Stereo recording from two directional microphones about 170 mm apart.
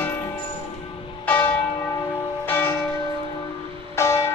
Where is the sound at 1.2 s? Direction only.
10° left (ahead or behind).